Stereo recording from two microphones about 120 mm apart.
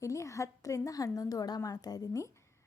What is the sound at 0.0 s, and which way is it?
A woman's voice, 25° left (ahead or behind).